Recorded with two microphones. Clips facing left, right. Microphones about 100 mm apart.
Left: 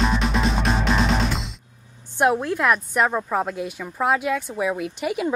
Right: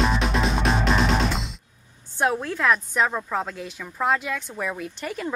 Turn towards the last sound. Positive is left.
turn(degrees=10)  # may be behind; listen again after turning